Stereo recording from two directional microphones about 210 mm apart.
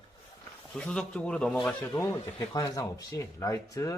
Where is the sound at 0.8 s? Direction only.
5° left (ahead or behind).